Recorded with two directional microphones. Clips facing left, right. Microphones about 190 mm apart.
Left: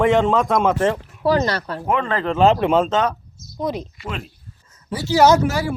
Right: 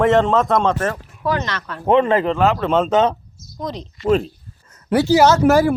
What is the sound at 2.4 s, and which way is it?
Speech, 15° left (ahead or behind).